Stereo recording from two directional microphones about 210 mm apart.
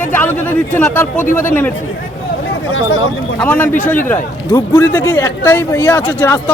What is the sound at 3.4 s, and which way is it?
A man's voice, 10° left (ahead or behind).